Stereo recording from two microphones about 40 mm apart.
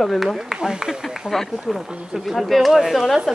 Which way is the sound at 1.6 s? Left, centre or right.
Centre.